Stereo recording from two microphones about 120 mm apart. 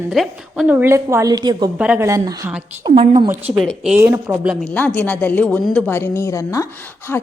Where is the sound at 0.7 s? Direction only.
20° right (ahead or behind).